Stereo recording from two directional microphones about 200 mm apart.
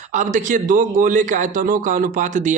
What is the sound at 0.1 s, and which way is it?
A man's voice, 40° right (ahead or behind).